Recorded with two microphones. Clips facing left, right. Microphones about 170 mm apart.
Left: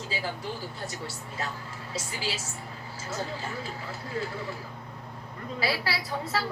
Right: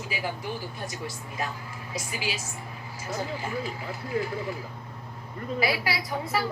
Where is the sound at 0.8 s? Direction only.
15° right (ahead or behind).